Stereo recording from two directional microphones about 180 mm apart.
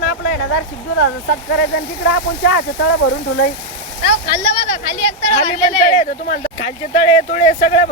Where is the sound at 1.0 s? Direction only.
75° left (ahead or behind).